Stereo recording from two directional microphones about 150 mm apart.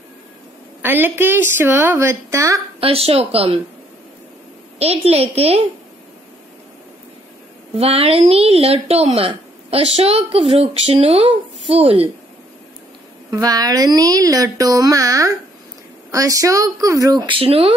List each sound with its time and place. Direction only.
0.8 s speech: 15° right (ahead or behind)
2.8 s a woman's voice: 40° right (ahead or behind)
4.7 s a woman's voice: 40° right (ahead or behind)
7.7 s a woman's voice: 40° right (ahead or behind)
13.3 s a woman's voice: 25° right (ahead or behind)
17.3 s a woman's voice: 40° right (ahead or behind)